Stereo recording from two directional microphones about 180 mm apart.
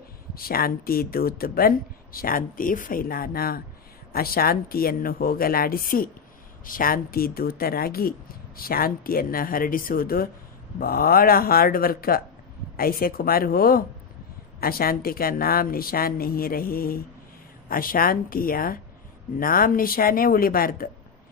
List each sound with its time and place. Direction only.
0.3 s speech: 55° left (ahead or behind)